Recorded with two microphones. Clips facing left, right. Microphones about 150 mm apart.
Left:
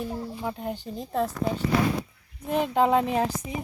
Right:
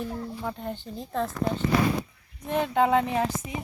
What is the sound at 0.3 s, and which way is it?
Speech, 10° left (ahead or behind).